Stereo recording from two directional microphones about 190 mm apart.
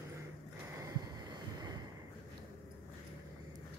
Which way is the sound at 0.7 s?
20° right (ahead or behind).